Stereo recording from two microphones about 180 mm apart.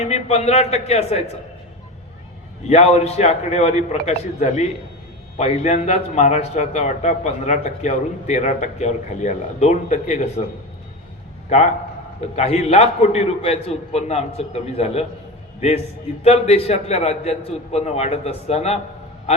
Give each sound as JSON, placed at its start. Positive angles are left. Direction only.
{"t": 0.0, "sound": "a man's voice", "side_deg": 35}
{"t": 2.6, "sound": "a man's voice", "side_deg": 35}
{"t": 11.4, "sound": "a man's voice", "side_deg": 40}
{"t": 16.2, "sound": "a man's voice", "side_deg": 35}